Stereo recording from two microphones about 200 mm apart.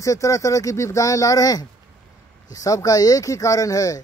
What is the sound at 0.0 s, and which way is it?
Speech, 15° left (ahead or behind).